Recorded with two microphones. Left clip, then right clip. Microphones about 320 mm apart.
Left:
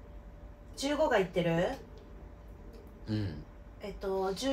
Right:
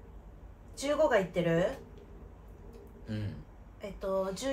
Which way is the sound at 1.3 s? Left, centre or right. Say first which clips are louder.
Right 1 dB; centre.